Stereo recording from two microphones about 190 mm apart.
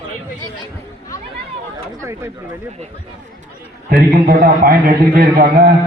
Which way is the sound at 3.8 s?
50° right (ahead or behind).